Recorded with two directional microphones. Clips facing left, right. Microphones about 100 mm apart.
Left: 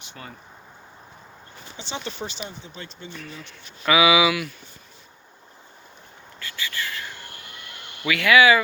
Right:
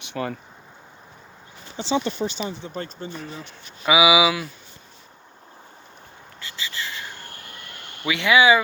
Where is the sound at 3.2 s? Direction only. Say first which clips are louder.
Right 4 dB; 30° right (ahead or behind).